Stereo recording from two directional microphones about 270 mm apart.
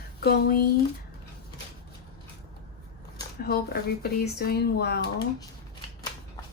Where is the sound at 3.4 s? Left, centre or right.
Left.